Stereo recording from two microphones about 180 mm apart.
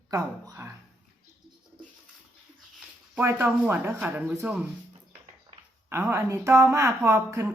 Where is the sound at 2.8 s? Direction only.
10° right (ahead or behind).